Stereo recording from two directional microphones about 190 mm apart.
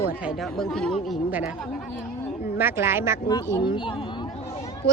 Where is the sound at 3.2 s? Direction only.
20° left (ahead or behind).